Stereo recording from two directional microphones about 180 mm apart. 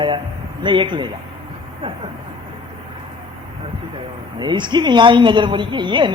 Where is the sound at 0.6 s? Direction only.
25° right (ahead or behind).